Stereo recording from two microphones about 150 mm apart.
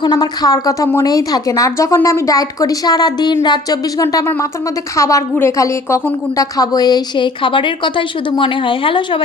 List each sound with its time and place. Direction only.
0.0 s a woman's voice: 25° left (ahead or behind)